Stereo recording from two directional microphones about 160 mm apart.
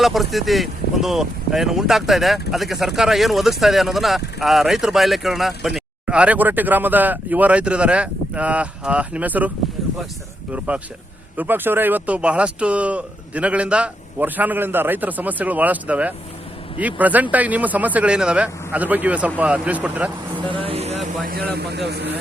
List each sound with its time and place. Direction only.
0.0 s speech: centre (ahead or behind)
10.7 s speech: 10° right (ahead or behind)
20.5 s speech: 35° right (ahead or behind)
21.2 s a man's voice: 80° right